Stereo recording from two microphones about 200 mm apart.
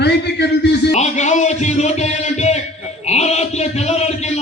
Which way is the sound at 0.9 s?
35° left (ahead or behind).